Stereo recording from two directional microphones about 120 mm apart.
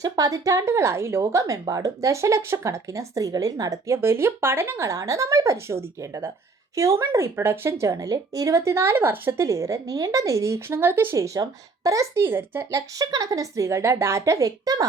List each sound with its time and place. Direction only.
0.0 s speech: 30° right (ahead or behind)